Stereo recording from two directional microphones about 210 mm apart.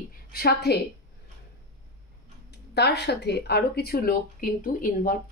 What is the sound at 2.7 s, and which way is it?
Speech, 55° left (ahead or behind).